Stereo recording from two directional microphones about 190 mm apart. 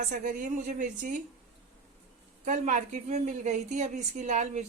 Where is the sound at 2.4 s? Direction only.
40° right (ahead or behind).